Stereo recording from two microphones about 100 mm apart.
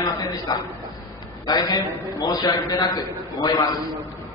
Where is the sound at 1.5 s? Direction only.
35° left (ahead or behind).